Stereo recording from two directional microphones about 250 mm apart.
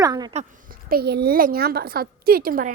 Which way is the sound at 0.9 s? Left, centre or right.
Right.